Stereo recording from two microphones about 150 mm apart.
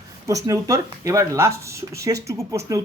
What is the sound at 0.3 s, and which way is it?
Speech, 20° right (ahead or behind).